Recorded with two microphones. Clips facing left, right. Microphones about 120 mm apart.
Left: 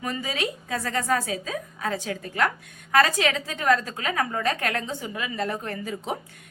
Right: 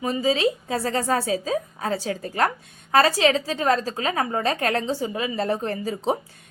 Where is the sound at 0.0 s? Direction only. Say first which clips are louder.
Right 8 dB; 25° right (ahead or behind).